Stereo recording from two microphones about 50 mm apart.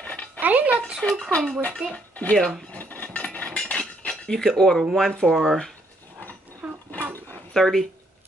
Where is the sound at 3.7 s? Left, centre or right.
Centre.